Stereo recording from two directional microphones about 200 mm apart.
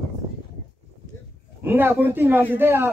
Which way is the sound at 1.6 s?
10° right (ahead or behind).